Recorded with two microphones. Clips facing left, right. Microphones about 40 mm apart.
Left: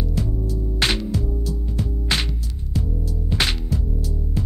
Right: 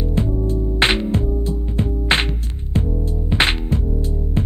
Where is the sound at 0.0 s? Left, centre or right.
Right.